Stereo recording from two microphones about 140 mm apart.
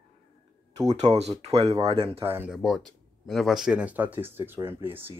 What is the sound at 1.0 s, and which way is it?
Speech, 55° right (ahead or behind).